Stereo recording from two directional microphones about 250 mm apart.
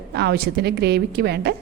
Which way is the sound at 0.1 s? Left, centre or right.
Right.